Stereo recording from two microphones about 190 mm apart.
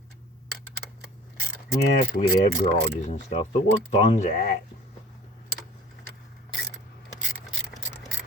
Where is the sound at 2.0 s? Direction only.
40° left (ahead or behind).